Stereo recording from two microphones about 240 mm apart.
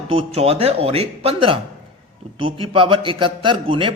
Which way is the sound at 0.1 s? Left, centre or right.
Right.